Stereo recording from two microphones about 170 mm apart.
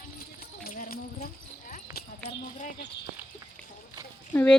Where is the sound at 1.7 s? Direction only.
65° left (ahead or behind).